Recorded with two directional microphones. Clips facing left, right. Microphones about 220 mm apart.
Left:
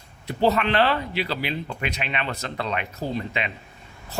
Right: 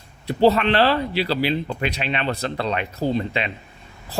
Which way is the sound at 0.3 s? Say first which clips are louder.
Right 5 dB; 30° right (ahead or behind).